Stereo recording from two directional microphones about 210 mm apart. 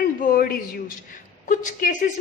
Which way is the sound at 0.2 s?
40° left (ahead or behind).